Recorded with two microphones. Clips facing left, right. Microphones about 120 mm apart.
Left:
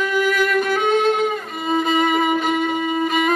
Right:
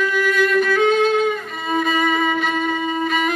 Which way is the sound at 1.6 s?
25° left (ahead or behind).